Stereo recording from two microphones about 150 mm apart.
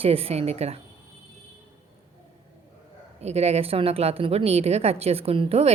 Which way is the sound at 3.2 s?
45° right (ahead or behind).